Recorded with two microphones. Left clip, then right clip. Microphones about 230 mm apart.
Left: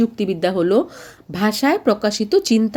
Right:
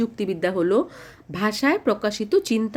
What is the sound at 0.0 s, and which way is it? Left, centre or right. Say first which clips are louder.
Speech: left 5 dB; centre.